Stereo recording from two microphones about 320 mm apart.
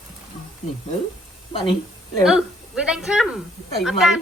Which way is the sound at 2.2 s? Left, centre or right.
Centre.